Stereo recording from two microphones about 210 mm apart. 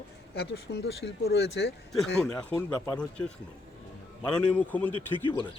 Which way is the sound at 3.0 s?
5° left (ahead or behind).